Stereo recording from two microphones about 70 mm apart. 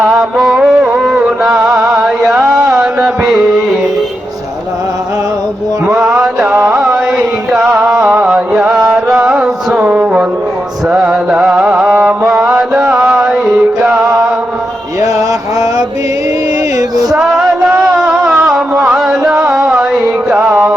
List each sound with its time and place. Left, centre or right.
0.0 s music: centre
5.8 s mantra: centre
6.7 s carnatic music: centre
8.0 s music: centre
11.9 s mantra: centre
12.9 s music: centre
13.2 s music: centre
15.0 s a sound: right
16.7 s music: right
17.2 s music: centre